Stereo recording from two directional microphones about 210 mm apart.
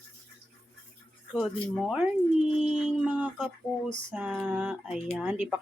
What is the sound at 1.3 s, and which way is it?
Speech, centre (ahead or behind).